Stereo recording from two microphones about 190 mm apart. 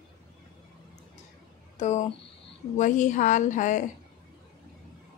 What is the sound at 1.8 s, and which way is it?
Speech, 40° left (ahead or behind).